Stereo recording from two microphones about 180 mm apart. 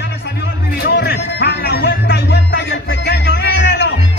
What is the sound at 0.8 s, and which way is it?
Music, 65° left (ahead or behind).